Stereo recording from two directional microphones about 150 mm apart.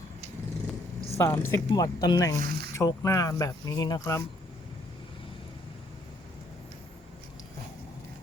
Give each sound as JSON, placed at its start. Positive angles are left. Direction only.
{"t": 1.2, "sound": "speech", "side_deg": 15}
{"t": 2.4, "sound": "speech", "side_deg": -90}
{"t": 2.7, "sound": "speech", "side_deg": 20}